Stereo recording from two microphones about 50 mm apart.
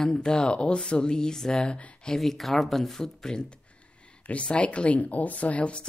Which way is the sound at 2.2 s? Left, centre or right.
Centre.